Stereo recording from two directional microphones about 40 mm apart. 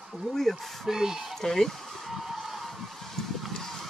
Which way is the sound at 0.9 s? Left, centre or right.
Centre.